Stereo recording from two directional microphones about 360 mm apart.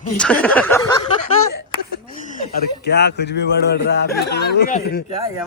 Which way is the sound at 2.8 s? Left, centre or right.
Left.